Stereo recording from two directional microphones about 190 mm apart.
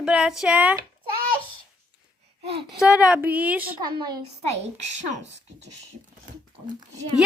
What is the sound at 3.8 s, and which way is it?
Speech, 20° right (ahead or behind).